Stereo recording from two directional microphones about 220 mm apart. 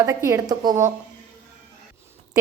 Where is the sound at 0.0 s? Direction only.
10° right (ahead or behind).